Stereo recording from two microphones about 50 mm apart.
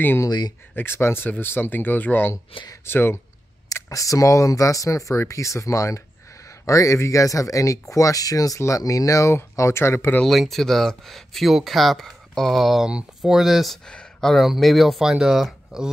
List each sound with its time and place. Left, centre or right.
0.7 s speech: left
3.7 s speech: left
9.6 s speech: left
10.2 s speech: centre
12.8 s speech: centre
13.8 s a sound: centre
14.3 s speech: centre